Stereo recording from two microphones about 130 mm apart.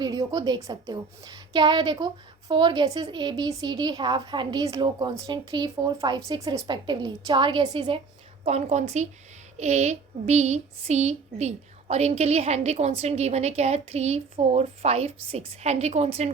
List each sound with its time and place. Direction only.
0.0 s a woman's voice: 30° right (ahead or behind)
8.4 s speech: 60° right (ahead or behind)